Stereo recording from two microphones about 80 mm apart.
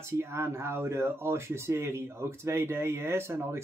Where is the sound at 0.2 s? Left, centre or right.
Right.